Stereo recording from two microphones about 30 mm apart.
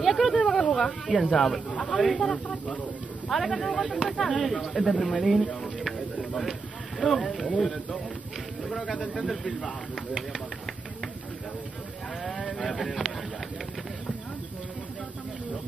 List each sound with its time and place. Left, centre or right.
0.0 s speech: centre
0.4 s a sound: centre
1.8 s speech: centre
2.3 s speech: left
3.3 s speech: centre
5.8 s a sound: centre
7.0 s speech: centre
12.2 s speech: centre